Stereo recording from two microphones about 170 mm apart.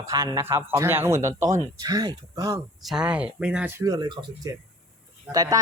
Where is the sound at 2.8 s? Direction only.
5° right (ahead or behind).